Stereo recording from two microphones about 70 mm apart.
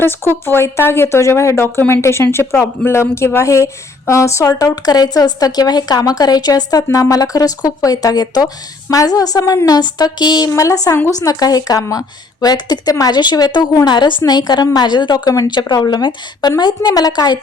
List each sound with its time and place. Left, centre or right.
0.0 s a woman's voice: left
9.6 s a woman's voice: left
10.5 s a woman's voice: left
11.2 s a woman's voice: left
13.1 s a woman's voice: left